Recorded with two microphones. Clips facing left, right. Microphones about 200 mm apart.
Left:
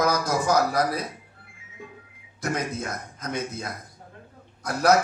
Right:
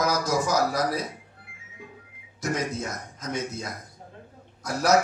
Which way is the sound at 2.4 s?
55° left (ahead or behind).